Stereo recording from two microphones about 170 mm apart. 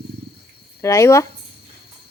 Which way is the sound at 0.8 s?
15° left (ahead or behind).